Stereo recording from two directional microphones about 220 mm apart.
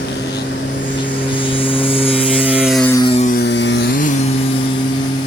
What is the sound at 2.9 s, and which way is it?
Mains hum, 20° left (ahead or behind).